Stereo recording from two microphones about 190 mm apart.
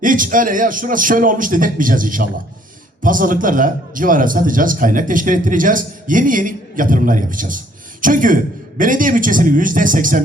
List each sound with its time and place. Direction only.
0.0 s a man's voice: 45° right (ahead or behind)